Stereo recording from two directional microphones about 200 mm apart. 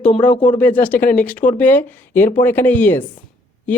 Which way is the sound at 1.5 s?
10° left (ahead or behind).